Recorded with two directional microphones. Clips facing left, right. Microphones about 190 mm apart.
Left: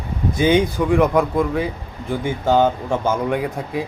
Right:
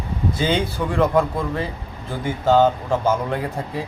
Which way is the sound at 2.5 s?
15° left (ahead or behind).